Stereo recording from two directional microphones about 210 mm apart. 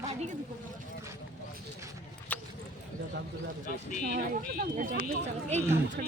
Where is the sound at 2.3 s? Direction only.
10° left (ahead or behind).